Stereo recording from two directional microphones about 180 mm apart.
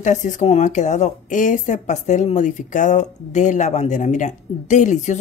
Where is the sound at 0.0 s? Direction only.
40° left (ahead or behind).